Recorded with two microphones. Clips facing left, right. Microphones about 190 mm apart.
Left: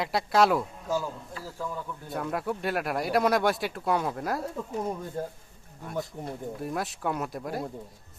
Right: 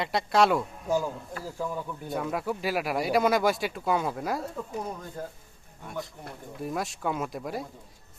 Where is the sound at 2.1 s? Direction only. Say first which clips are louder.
Even; centre (ahead or behind).